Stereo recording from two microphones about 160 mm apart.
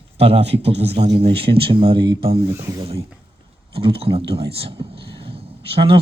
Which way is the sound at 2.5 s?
15° right (ahead or behind).